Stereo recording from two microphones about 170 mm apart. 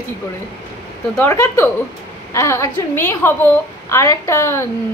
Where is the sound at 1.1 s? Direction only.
15° left (ahead or behind).